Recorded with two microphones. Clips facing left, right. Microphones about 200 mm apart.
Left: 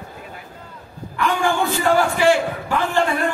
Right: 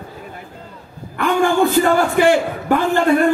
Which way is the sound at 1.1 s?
55° right (ahead or behind).